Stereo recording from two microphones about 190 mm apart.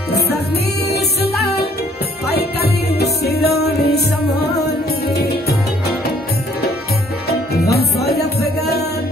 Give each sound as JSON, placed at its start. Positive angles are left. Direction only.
{"t": 2.2, "sound": "music", "side_deg": 55}
{"t": 7.2, "sound": "music", "side_deg": 55}